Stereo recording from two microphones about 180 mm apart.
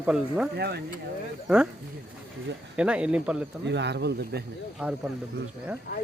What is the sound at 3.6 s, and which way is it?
Speech, 75° right (ahead or behind).